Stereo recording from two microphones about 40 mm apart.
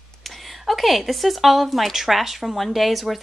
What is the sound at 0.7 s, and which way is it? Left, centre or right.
Speech, centre.